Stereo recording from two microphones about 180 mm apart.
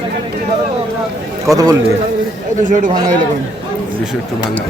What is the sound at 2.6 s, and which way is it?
Speech, 45° right (ahead or behind).